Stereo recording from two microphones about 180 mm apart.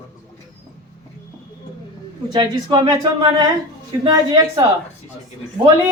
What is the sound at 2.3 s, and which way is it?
Speech, 25° right (ahead or behind).